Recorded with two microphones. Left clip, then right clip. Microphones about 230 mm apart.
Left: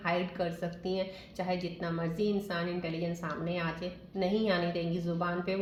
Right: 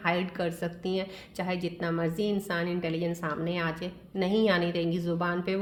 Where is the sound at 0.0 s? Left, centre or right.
Right.